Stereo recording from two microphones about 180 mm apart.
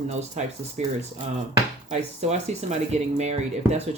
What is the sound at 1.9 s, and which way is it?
Speech, 40° right (ahead or behind).